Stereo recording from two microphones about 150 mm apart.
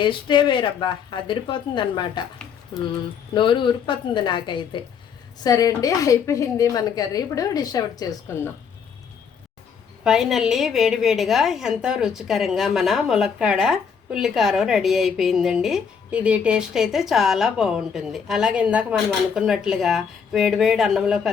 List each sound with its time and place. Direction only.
0.0 s a woman's voice: 30° left (ahead or behind)
3.3 s a woman's voice: 35° left (ahead or behind)
10.0 s a woman's voice: 5° right (ahead or behind)